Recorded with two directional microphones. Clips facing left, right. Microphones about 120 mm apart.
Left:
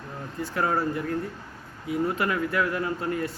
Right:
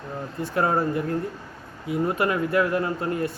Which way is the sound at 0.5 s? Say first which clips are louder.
Right 3 dB; 25° right (ahead or behind).